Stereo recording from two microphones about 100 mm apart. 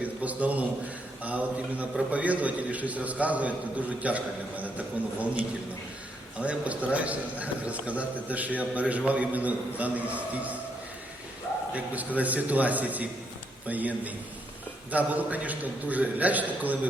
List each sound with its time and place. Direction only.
0.0 s a sound: 15° right (ahead or behind)
1.2 s a man's voice: 15° right (ahead or behind)
11.7 s a man's voice: 15° right (ahead or behind)